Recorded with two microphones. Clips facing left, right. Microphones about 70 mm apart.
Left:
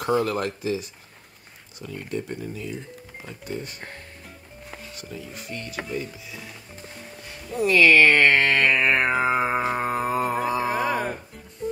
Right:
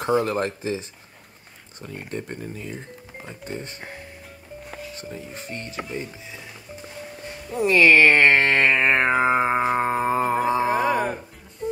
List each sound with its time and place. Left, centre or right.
0.0 s speech: right
4.9 s speech: right
7.5 s speech: right
9.2 s music: right
10.5 s a sound: right
11.6 s music: centre